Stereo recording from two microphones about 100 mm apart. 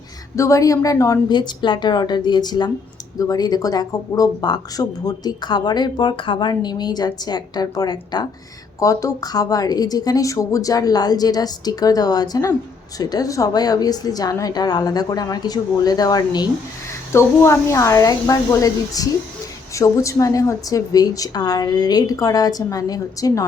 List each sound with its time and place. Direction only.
0.3 s a woman's voice: 30° left (ahead or behind)
1.3 s speech: 50° left (ahead or behind)
8.8 s a woman's voice: 35° left (ahead or behind)
17.1 s a woman's voice: 25° left (ahead or behind)